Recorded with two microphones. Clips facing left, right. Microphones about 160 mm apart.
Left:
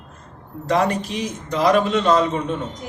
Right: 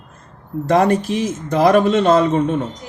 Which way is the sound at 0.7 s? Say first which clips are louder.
Right 5 dB; 50° right (ahead or behind).